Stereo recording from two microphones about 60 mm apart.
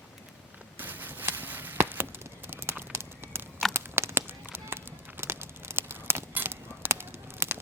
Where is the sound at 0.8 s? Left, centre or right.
Right.